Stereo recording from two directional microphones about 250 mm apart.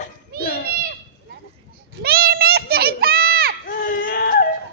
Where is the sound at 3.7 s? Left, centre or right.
Left.